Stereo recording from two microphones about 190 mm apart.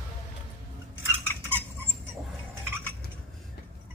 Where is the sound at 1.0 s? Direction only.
10° right (ahead or behind).